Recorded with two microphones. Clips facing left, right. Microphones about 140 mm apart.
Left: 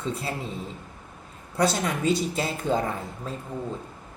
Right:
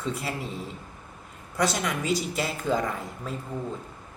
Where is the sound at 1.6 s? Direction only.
30° left (ahead or behind).